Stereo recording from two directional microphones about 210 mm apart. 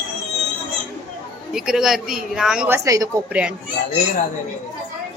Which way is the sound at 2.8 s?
15° right (ahead or behind).